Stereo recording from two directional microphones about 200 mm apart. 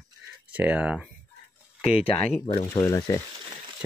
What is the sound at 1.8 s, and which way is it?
Speech, 30° left (ahead or behind).